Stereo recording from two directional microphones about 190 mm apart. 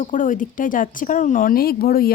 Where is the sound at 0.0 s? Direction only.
45° left (ahead or behind).